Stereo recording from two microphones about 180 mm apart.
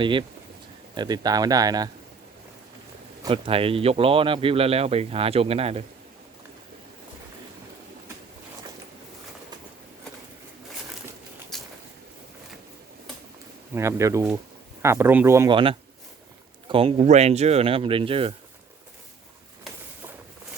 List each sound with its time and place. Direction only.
0.0 s speech: 25° right (ahead or behind)
3.2 s speech: 30° right (ahead or behind)
11.5 s a sound: centre (ahead or behind)
13.7 s speech: 15° right (ahead or behind)
16.6 s speech: 30° right (ahead or behind)